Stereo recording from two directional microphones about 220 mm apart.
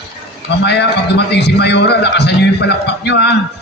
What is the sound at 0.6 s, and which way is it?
A man's voice, 50° left (ahead or behind).